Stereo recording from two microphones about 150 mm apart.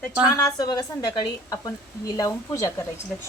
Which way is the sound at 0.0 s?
20° left (ahead or behind).